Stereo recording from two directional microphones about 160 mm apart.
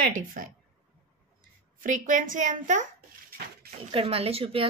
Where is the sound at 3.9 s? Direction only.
35° right (ahead or behind).